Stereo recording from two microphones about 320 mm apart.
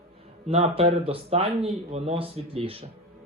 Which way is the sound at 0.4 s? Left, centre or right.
Centre.